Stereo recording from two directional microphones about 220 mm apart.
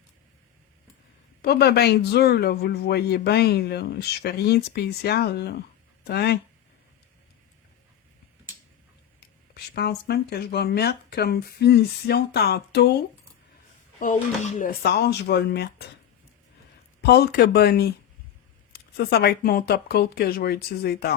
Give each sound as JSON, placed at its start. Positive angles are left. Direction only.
{"t": 1.4, "sound": "speech", "side_deg": 45}
{"t": 9.2, "sound": "speech", "side_deg": 45}
{"t": 14.0, "sound": "speech", "side_deg": 35}
{"t": 17.0, "sound": "speech", "side_deg": 45}